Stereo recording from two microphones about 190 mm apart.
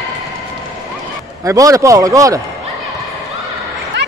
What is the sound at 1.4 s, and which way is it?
Speech, 15° right (ahead or behind).